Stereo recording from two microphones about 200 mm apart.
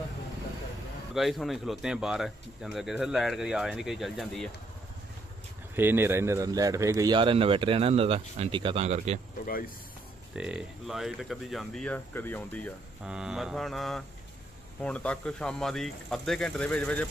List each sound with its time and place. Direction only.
1.1 s speech: centre (ahead or behind)
5.7 s speech: 10° right (ahead or behind); by 9.2 s 35° right (ahead or behind)
10.3 s speech: 5° right (ahead or behind)
13.1 s speech: 5° right (ahead or behind)